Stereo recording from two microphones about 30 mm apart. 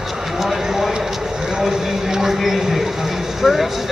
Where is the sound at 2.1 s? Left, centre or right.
Centre.